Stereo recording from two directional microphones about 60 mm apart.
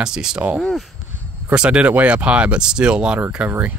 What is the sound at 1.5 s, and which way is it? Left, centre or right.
Speech, centre.